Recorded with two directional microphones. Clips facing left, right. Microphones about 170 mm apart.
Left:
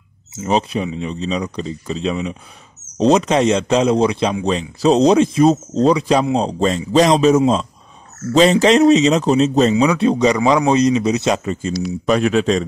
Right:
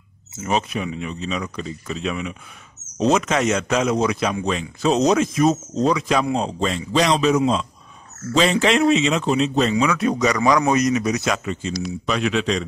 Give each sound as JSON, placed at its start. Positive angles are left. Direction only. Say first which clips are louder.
{"t": 0.4, "sound": "a man's voice", "louder": "left 5 dB", "side_deg": 30}